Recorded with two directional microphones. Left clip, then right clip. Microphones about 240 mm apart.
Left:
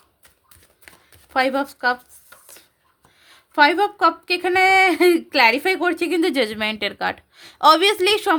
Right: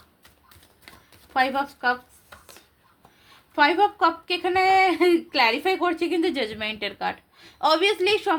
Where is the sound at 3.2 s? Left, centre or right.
Left.